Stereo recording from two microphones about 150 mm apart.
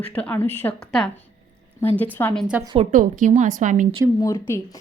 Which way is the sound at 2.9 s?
55° right (ahead or behind).